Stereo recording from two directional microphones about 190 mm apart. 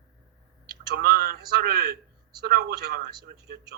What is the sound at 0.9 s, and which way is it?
A man's voice, 55° right (ahead or behind).